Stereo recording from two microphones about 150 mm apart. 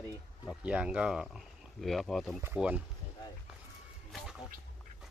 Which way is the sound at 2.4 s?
10° right (ahead or behind).